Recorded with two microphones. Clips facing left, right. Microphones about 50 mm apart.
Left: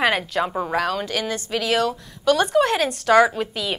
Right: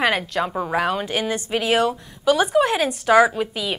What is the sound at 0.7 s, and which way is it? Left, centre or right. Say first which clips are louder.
Speech: right 2 dB; centre.